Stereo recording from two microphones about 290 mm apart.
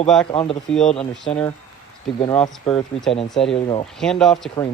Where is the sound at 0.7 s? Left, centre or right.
Centre.